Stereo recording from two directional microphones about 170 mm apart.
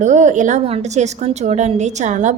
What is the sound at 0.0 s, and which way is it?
A woman's voice, 45° right (ahead or behind).